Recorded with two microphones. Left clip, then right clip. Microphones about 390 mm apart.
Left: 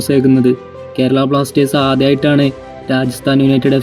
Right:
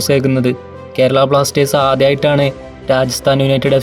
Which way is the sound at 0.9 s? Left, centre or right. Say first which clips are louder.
Right 3 dB; right.